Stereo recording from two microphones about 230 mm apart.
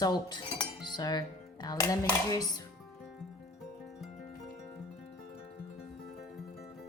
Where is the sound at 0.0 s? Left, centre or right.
Centre.